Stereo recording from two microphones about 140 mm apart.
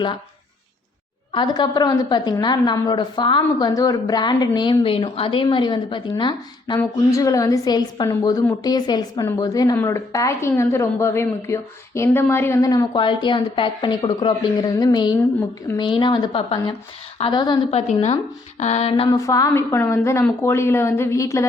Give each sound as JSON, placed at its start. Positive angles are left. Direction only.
{"t": 1.3, "sound": "speech", "side_deg": 30}
{"t": 6.7, "sound": "a woman's voice", "side_deg": 25}
{"t": 17.7, "sound": "a woman's voice", "side_deg": 50}
{"t": 19.1, "sound": "a woman's voice", "side_deg": 25}